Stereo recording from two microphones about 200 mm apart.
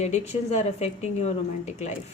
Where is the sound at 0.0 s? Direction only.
35° left (ahead or behind).